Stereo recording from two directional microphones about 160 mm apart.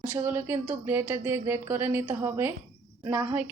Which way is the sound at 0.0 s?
15° right (ahead or behind).